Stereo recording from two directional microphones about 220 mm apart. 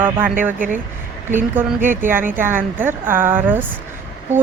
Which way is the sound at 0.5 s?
35° right (ahead or behind).